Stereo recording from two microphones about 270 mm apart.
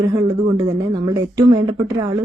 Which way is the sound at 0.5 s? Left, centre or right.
Centre.